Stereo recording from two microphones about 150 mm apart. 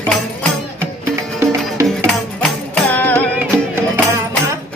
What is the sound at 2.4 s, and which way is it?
Music, 10° left (ahead or behind).